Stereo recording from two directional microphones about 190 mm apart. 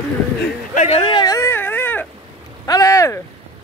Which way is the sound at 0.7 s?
35° left (ahead or behind).